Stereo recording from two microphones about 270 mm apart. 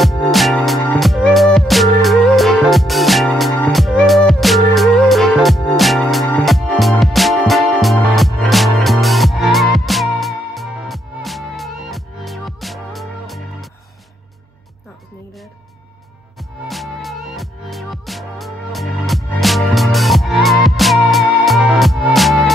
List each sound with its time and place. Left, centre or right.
0.0 s music: centre
16.3 s music: centre